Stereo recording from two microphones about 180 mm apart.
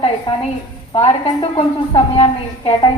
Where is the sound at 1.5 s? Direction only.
30° left (ahead or behind).